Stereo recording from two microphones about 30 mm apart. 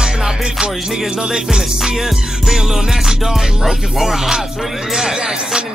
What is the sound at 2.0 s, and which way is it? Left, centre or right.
Music, centre.